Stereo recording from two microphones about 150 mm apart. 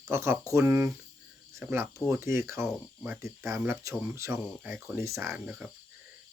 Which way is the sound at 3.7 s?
20° right (ahead or behind).